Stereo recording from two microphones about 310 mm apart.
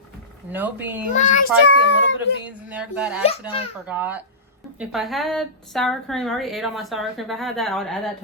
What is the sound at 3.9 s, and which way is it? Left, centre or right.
A woman's voice, centre.